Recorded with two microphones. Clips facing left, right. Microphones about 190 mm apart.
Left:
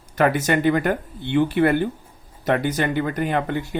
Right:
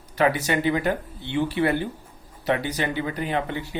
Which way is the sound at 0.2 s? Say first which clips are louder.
Left 3 dB; 50° left (ahead or behind).